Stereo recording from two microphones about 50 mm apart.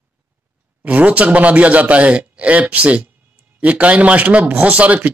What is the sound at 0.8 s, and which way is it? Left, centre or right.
Speech, right.